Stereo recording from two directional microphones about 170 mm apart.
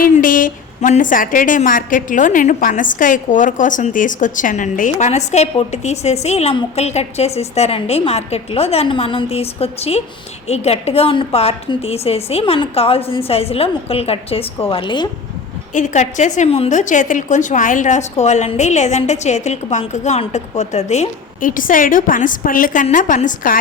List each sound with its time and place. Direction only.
0.0 s a woman's voice: 50° left (ahead or behind); by 15.1 s 25° left (ahead or behind)
15.7 s a woman's voice: 45° left (ahead or behind)